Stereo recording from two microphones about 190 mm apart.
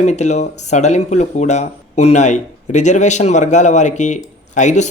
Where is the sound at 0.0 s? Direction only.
35° left (ahead or behind).